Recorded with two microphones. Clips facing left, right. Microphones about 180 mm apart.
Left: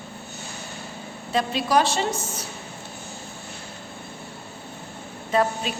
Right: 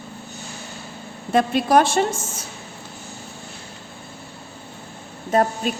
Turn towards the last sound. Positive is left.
turn(degrees=-45)  # may be behind; listen again after turning